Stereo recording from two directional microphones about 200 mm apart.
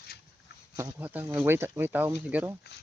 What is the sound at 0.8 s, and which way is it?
Speech, 10° right (ahead or behind).